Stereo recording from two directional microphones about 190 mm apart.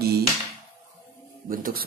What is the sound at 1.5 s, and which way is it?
Speech, 50° right (ahead or behind).